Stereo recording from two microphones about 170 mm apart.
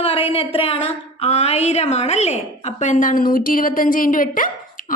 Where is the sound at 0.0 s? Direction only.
35° left (ahead or behind).